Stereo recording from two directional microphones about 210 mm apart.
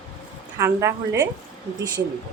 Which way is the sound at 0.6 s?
15° right (ahead or behind).